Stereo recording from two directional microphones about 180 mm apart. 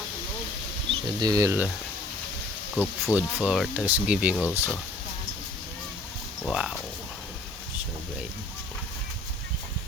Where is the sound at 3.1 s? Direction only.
5° right (ahead or behind).